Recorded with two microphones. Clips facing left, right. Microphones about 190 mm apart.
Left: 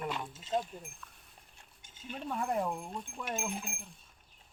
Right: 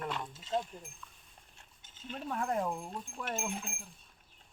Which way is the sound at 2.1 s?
Centre (ahead or behind).